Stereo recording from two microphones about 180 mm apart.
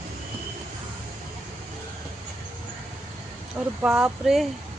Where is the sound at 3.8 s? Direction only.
5° right (ahead or behind).